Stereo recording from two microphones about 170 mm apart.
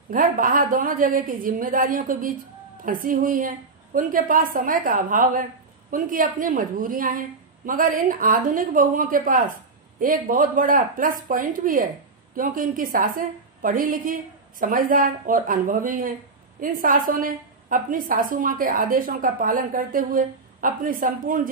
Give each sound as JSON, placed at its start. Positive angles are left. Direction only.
{"t": 0.1, "sound": "a woman's voice", "side_deg": -55}